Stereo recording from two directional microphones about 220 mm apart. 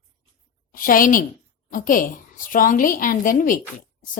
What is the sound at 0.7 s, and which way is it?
A woman's voice, 40° left (ahead or behind).